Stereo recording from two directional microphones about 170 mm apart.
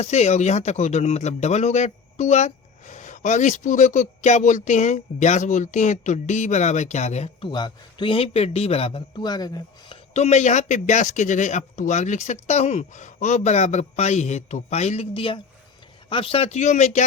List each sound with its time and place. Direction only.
0.0 s speech: 40° left (ahead or behind)
7.4 s speech: 25° left (ahead or behind)
10.2 s speech: 40° left (ahead or behind)